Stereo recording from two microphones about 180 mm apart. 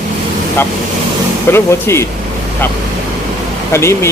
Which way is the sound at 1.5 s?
15° left (ahead or behind).